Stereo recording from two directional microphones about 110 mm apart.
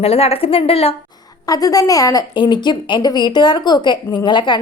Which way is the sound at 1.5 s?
35° left (ahead or behind).